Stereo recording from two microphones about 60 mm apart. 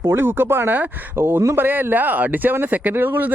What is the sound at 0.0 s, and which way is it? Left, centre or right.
Speech, right.